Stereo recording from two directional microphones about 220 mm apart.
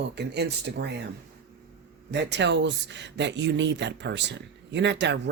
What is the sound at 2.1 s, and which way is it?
Speech, 50° right (ahead or behind).